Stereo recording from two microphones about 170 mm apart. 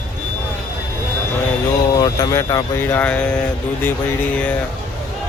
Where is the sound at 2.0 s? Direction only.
20° left (ahead or behind).